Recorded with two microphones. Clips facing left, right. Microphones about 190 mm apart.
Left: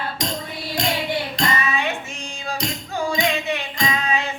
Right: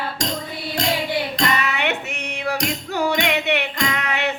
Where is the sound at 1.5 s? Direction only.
70° right (ahead or behind).